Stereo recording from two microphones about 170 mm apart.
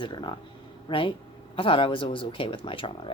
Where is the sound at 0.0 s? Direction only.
25° left (ahead or behind).